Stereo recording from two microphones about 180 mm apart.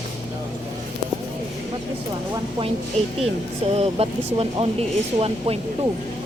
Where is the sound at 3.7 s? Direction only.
35° right (ahead or behind).